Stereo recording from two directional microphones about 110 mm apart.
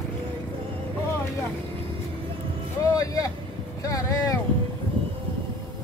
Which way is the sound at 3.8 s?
30° left (ahead or behind).